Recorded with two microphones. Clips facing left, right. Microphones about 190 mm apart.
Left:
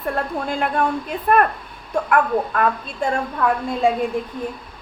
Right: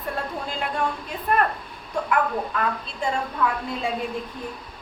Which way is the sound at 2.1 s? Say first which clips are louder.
Left 5 dB; 55° left (ahead or behind).